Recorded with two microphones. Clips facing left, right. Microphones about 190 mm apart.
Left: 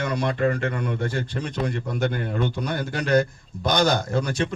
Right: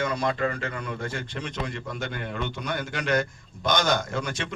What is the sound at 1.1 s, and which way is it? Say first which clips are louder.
A man's voice: left 5 dB; 35° left (ahead or behind).